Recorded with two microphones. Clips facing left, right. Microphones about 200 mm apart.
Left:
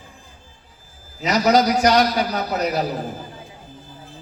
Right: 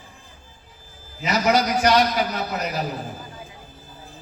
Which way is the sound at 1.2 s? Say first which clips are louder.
Left 4 dB; 35° left (ahead or behind).